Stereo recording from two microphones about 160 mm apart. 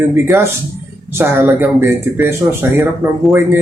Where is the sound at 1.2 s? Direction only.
10° right (ahead or behind).